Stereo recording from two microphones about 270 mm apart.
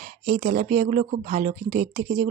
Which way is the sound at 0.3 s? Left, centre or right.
Right.